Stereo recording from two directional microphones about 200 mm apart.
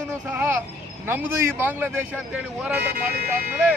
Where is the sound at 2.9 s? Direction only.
50° right (ahead or behind).